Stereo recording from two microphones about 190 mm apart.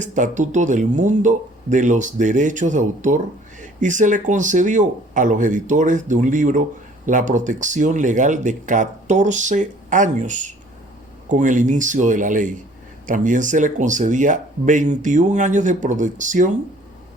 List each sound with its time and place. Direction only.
0.0 s speech: 40° right (ahead or behind)